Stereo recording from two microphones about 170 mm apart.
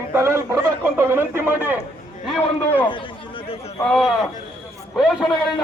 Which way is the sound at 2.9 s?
30° left (ahead or behind).